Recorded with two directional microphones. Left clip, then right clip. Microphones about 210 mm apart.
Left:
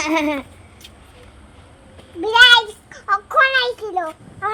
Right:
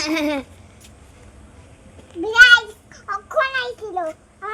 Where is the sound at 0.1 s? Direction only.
30° right (ahead or behind).